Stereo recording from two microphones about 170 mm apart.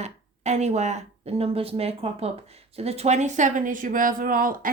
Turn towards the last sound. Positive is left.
turn(degrees=-55)  # may be behind; listen again after turning